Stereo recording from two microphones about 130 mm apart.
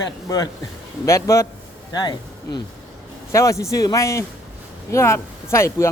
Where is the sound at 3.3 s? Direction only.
25° left (ahead or behind).